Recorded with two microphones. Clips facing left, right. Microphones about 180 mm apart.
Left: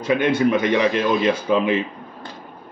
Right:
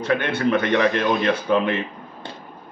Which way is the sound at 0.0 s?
10° left (ahead or behind).